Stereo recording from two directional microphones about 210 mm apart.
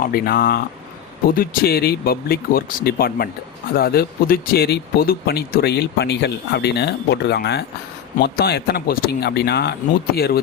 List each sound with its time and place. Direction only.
0.0 s speech: 45° left (ahead or behind)